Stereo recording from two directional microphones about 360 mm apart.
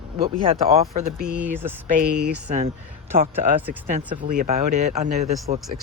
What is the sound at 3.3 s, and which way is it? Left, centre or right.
Speech, centre.